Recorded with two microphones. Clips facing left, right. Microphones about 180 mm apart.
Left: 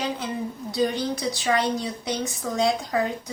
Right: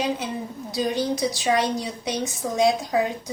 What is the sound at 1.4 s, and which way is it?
A woman's voice, 20° right (ahead or behind).